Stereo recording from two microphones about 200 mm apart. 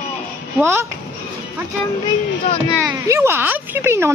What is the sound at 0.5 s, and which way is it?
Speech, 10° right (ahead or behind).